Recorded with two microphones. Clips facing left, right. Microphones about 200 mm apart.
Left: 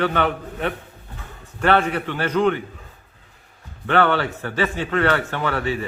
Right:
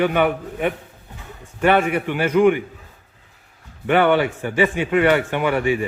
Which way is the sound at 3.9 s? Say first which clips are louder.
Right 3 dB; 15° right (ahead or behind).